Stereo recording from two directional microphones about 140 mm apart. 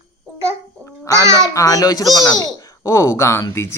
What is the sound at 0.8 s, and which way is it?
Babbling, 20° left (ahead or behind).